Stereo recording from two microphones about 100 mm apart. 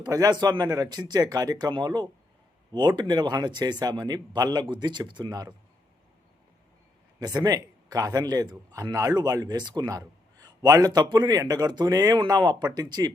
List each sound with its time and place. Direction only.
0.0 s speech: 40° right (ahead or behind)
7.2 s speech: 40° right (ahead or behind)